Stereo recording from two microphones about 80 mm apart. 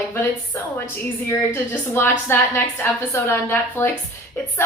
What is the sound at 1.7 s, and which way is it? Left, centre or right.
A woman's voice, left.